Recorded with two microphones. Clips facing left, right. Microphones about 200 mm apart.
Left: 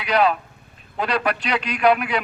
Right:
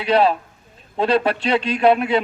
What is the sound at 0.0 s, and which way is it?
A man's voice, 30° right (ahead or behind).